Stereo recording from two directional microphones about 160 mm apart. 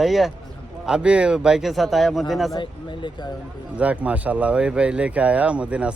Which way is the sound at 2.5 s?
30° left (ahead or behind).